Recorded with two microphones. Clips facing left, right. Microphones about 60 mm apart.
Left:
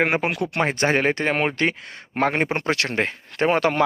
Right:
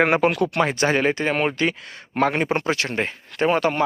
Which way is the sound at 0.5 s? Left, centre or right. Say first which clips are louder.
Right 1 dB; left.